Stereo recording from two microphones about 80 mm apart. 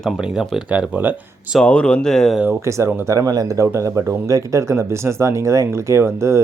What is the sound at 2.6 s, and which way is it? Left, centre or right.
Speech, right.